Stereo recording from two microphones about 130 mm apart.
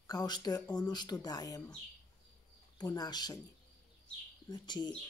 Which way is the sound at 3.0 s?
30° left (ahead or behind).